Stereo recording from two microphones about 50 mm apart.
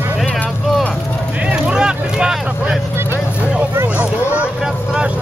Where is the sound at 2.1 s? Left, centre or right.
Centre.